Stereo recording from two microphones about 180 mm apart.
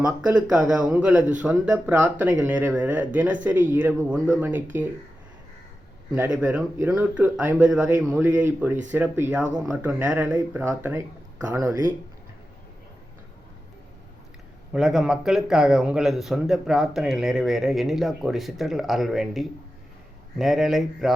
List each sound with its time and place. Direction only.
0.3 s speech: 5° right (ahead or behind)
6.3 s speech: 5° right (ahead or behind)
14.7 s speech: centre (ahead or behind)